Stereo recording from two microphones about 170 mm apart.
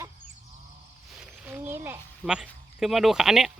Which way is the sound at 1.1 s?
5° right (ahead or behind).